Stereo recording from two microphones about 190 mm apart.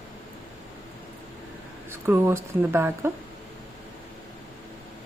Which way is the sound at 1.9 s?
10° right (ahead or behind).